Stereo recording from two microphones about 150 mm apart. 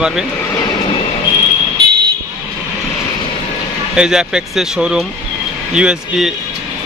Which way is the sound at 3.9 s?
5° right (ahead or behind).